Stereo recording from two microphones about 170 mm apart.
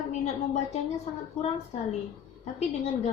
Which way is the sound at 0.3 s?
40° left (ahead or behind).